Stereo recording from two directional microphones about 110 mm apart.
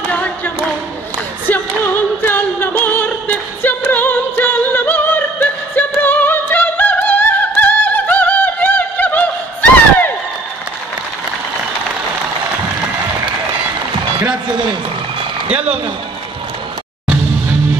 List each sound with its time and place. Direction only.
0.1 s a capella: 15° left (ahead or behind)
1.5 s music: 15° left (ahead or behind)